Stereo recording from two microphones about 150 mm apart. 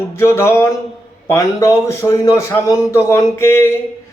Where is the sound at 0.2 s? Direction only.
15° left (ahead or behind).